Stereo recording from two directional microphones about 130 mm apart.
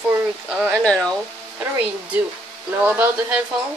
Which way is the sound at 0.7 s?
5° left (ahead or behind).